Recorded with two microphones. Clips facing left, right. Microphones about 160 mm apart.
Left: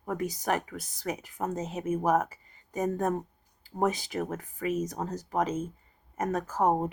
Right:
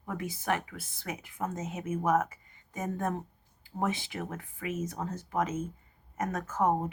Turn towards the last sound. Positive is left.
turn(degrees=35)  # may be behind; listen again after turning